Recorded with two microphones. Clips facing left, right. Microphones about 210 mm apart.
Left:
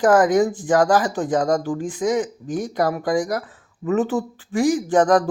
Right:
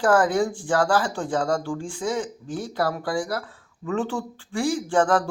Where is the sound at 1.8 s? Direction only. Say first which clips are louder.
Left 6 dB; 10° left (ahead or behind).